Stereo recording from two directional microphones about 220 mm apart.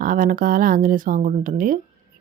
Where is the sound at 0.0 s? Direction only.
40° right (ahead or behind).